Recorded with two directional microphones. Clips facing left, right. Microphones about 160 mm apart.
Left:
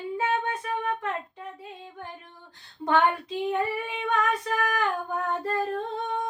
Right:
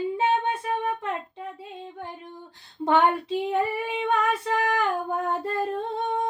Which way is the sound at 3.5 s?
30° right (ahead or behind).